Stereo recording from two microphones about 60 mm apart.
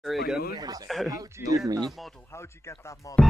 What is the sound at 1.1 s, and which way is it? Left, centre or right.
Speech, right.